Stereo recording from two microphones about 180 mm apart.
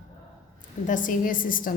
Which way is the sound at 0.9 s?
50° left (ahead or behind).